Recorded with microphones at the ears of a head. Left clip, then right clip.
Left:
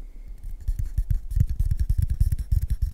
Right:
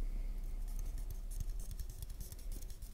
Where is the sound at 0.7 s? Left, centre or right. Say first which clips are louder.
Left 19 dB; left.